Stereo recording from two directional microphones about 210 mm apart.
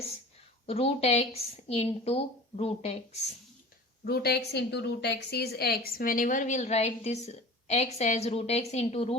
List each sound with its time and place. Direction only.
0.7 s speech: 30° left (ahead or behind)
4.0 s a woman's voice: 50° left (ahead or behind); by 9.1 s 30° left (ahead or behind)